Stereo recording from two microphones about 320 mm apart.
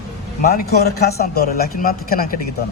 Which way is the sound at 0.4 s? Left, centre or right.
Left.